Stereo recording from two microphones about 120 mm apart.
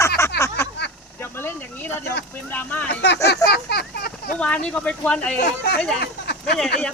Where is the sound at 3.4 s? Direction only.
30° left (ahead or behind).